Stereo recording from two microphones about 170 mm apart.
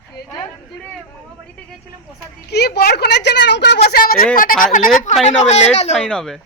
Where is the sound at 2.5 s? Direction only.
75° left (ahead or behind).